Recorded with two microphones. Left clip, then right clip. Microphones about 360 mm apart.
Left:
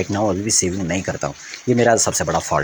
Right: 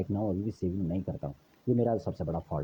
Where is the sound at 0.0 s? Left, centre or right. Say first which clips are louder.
Left 13 dB; right.